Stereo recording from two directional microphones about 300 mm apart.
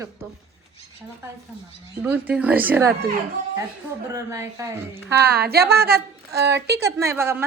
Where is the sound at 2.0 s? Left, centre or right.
Centre.